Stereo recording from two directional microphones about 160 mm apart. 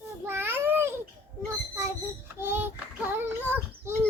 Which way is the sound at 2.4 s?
15° right (ahead or behind).